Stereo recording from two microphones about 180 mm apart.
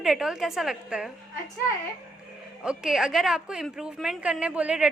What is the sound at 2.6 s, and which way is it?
A woman's voice, 5° right (ahead or behind).